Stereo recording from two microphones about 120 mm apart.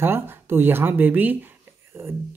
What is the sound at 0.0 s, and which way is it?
Speech, 20° right (ahead or behind).